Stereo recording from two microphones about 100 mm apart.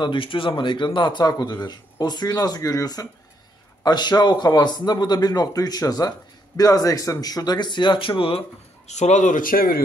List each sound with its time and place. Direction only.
0.0 s a man's voice: 55° left (ahead or behind); by 9.1 s 75° left (ahead or behind)